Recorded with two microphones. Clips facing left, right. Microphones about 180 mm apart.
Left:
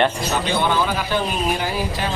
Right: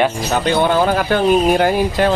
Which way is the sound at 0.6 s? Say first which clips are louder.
Right 6 dB; 50° right (ahead or behind).